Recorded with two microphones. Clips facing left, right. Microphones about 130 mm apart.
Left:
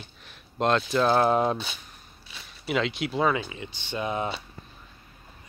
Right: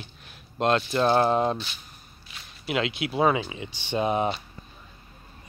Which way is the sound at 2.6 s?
5° right (ahead or behind).